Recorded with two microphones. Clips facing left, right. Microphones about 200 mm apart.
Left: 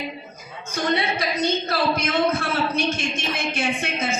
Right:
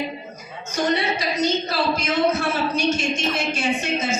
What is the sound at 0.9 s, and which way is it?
A woman's voice, 55° left (ahead or behind).